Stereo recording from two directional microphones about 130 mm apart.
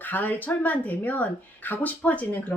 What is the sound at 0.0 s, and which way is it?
Speech, 15° left (ahead or behind).